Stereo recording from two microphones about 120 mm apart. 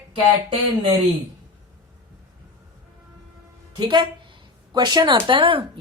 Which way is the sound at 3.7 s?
40° right (ahead or behind).